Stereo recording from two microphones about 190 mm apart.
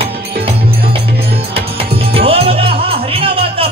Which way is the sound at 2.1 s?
30° right (ahead or behind).